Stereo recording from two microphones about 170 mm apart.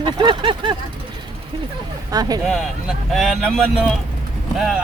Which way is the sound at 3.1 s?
Centre (ahead or behind).